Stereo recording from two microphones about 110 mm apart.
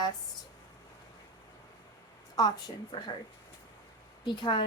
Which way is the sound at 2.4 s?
35° left (ahead or behind).